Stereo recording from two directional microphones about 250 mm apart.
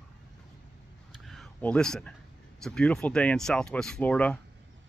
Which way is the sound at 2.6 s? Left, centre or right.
Centre.